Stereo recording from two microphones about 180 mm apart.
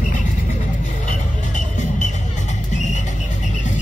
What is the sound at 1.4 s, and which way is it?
Music, 40° left (ahead or behind).